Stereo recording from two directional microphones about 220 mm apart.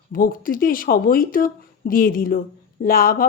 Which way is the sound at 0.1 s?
40° left (ahead or behind).